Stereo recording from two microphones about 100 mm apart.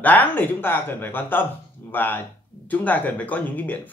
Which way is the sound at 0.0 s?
15° left (ahead or behind).